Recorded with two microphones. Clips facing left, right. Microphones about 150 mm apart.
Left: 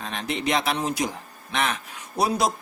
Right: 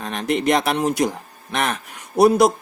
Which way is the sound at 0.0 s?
50° right (ahead or behind).